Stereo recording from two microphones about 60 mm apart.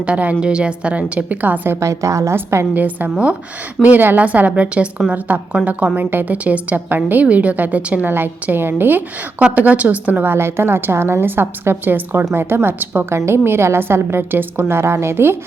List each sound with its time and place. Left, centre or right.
0.0 s a woman's voice: right
1.8 s a woman's voice: right
2.3 s a woman's voice: right
2.7 s a woman's voice: right
8.0 s a woman's voice: right
10.3 s a woman's voice: right
13.1 s a woman's voice: right